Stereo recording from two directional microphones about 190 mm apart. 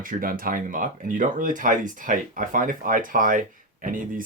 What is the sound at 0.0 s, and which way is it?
Speech, 50° right (ahead or behind).